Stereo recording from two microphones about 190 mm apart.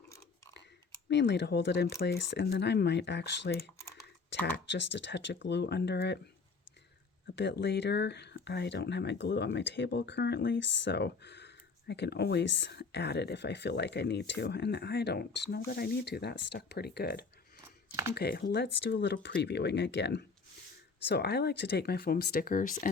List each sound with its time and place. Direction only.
1.0 s speech: 65° left (ahead or behind)
7.3 s speech: 65° left (ahead or behind); by 22.9 s 45° left (ahead or behind)